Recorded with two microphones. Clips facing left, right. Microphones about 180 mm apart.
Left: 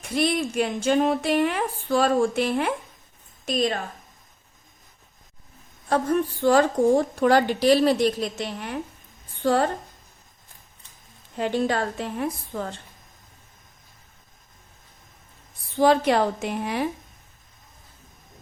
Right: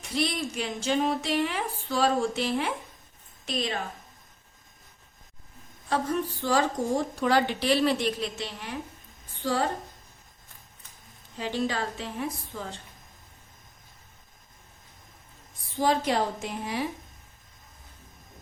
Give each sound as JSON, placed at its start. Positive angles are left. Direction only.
{"t": 0.0, "sound": "a woman's voice", "side_deg": 55}
{"t": 5.9, "sound": "a woman's voice", "side_deg": 55}
{"t": 11.3, "sound": "a woman's voice", "side_deg": 55}
{"t": 15.8, "sound": "a woman's voice", "side_deg": 65}